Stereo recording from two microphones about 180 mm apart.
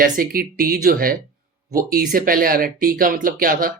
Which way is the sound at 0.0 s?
50° right (ahead or behind).